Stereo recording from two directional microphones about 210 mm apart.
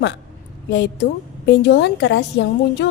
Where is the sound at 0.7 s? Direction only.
55° left (ahead or behind).